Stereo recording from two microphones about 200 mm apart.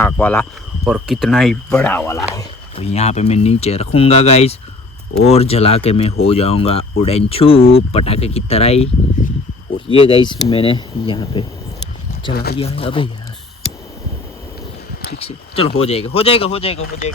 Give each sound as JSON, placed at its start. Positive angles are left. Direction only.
{"t": 0.0, "sound": "speech", "side_deg": 10}
{"t": 0.9, "sound": "speech", "side_deg": 0}
{"t": 2.7, "sound": "speech", "side_deg": 30}
{"t": 12.3, "sound": "speech", "side_deg": 50}
{"t": 12.5, "sound": "speech", "side_deg": 30}
{"t": 15.2, "sound": "speech", "side_deg": 30}